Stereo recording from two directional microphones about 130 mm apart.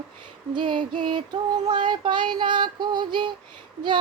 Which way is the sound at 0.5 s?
35° right (ahead or behind).